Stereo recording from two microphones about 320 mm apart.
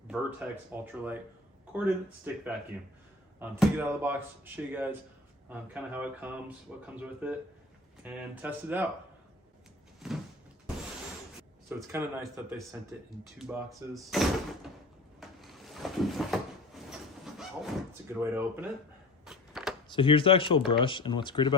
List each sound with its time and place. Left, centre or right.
0.1 s speech: centre
3.5 s speech: centre
10.0 s cupboard open or close: centre
11.8 s speech: centre
15.2 s a sound: centre
17.3 s speech: centre
19.2 s a sound: centre
19.9 s speech: centre